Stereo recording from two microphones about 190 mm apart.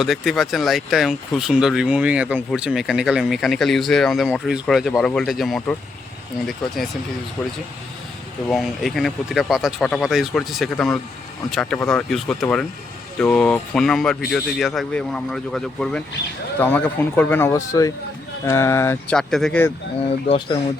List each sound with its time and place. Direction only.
0.0 s speech: centre (ahead or behind)
8.4 s speech: centre (ahead or behind)
19.1 s speech: centre (ahead or behind)
20.1 s speech: 30° left (ahead or behind)